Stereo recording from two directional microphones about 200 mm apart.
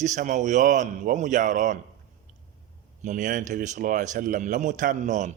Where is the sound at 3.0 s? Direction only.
40° right (ahead or behind).